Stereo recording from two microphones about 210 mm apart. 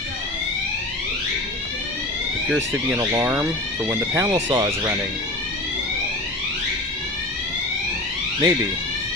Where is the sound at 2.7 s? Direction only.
10° right (ahead or behind).